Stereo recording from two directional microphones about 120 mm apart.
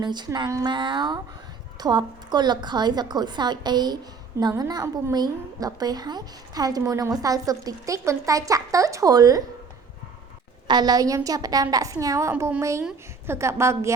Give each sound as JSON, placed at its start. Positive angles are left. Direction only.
{"t": 0.0, "sound": "a woman's voice", "side_deg": -35}
{"t": 10.7, "sound": "a woman's voice", "side_deg": -35}